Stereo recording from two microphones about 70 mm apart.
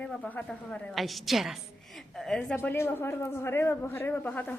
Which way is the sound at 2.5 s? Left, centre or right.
Left.